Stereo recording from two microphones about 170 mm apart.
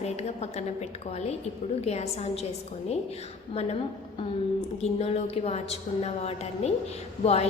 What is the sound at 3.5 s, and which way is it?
Speech, 35° left (ahead or behind).